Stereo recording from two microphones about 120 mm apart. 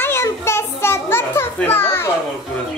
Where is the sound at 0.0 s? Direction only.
20° left (ahead or behind).